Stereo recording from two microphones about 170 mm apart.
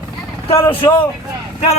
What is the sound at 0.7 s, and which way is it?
Speech, 10° left (ahead or behind).